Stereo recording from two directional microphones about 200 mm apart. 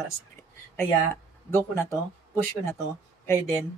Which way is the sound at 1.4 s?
10° left (ahead or behind).